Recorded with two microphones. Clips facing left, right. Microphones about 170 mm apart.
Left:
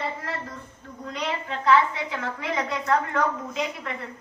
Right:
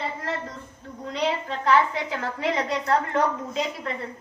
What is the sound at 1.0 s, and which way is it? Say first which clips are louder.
Speech: right 5 dB; 35° right (ahead or behind).